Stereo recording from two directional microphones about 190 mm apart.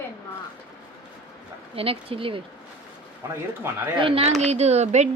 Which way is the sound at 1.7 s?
30° right (ahead or behind).